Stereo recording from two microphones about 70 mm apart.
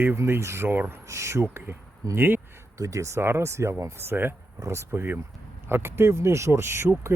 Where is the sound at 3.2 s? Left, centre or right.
Right.